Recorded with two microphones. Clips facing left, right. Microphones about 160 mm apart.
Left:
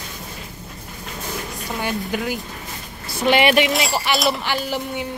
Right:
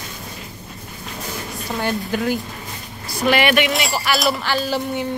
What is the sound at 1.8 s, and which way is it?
Speech, 10° left (ahead or behind).